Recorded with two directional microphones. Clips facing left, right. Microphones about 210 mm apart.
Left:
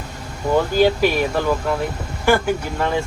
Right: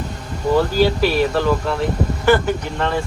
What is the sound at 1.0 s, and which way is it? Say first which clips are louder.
Speech: right 1 dB; 15° left (ahead or behind).